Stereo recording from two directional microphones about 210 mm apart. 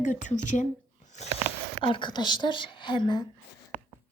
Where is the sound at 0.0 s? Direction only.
35° left (ahead or behind).